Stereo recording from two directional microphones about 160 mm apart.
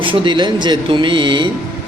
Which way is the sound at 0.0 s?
30° right (ahead or behind).